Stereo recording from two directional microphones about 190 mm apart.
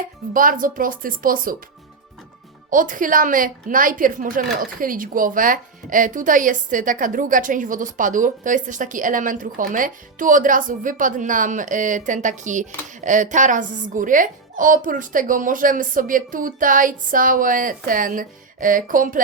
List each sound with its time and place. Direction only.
0.3 s a woman's voice: 45° right (ahead or behind)
2.6 s a woman's voice: 45° right (ahead or behind)